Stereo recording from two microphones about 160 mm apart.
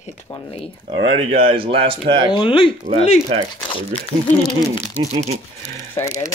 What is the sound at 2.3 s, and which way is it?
Speech, 30° left (ahead or behind).